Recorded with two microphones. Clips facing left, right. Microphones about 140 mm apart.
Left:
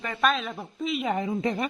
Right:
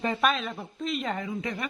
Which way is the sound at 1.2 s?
30° left (ahead or behind).